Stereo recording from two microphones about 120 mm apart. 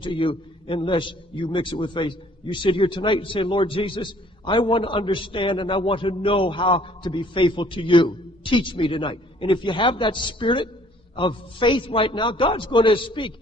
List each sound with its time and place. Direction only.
0.0 s a man's voice: 45° left (ahead or behind)